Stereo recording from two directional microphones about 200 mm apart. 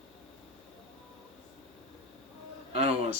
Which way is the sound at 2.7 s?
30° right (ahead or behind).